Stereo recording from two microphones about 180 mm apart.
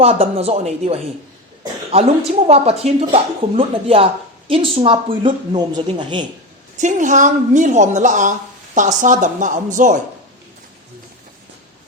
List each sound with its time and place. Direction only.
0.0 s speech: 35° right (ahead or behind)
2.5 s speech: 35° right (ahead or behind)
6.7 s a woman's voice: 45° right (ahead or behind)